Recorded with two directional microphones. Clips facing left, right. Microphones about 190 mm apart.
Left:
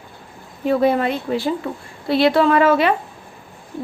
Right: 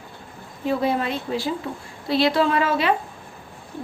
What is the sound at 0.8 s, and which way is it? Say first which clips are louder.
A woman's voice: left 8 dB; 60° left (ahead or behind).